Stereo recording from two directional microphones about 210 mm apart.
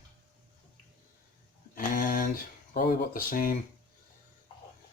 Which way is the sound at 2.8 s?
40° left (ahead or behind).